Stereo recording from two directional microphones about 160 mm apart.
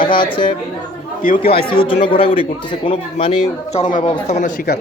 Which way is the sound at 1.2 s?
55° left (ahead or behind).